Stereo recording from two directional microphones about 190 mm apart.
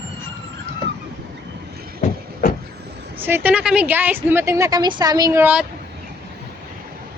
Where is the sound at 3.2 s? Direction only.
10° right (ahead or behind).